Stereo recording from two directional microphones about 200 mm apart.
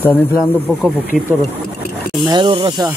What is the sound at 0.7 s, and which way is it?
Speech, 5° left (ahead or behind).